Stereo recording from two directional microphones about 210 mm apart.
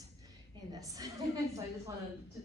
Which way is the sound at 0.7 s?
15° right (ahead or behind).